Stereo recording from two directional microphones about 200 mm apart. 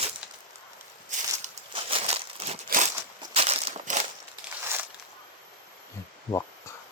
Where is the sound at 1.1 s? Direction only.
35° right (ahead or behind).